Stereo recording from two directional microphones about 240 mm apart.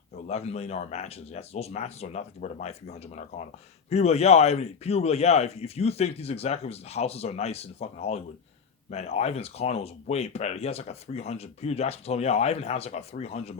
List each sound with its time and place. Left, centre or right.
0.3 s speech: left